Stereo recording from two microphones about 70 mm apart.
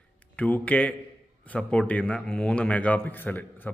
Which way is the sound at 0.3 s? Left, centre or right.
Left.